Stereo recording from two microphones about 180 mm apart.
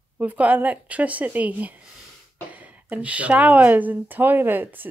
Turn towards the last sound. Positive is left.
turn(degrees=-10)  # may be behind; listen again after turning